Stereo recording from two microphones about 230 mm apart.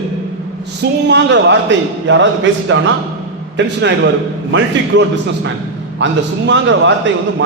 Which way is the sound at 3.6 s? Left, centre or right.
Right.